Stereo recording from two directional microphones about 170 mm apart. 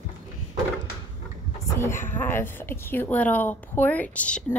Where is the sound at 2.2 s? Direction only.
15° left (ahead or behind).